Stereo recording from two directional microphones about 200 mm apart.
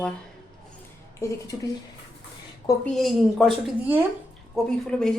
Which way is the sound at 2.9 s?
Centre (ahead or behind).